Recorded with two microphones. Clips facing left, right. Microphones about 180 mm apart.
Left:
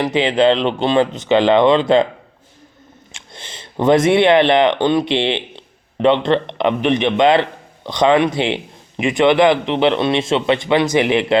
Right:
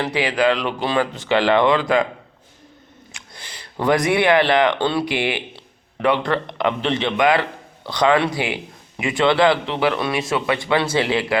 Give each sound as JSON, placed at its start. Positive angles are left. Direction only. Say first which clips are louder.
{"t": 0.0, "sound": "a man's voice", "louder": "left 5 dB", "side_deg": 20}
{"t": 3.1, "sound": "a man's voice", "louder": "left 4 dB", "side_deg": 25}